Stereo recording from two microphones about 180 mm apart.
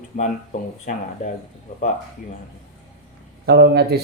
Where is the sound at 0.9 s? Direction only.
50° left (ahead or behind).